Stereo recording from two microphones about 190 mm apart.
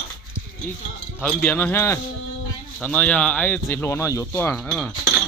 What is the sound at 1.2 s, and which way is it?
Speech, 10° left (ahead or behind).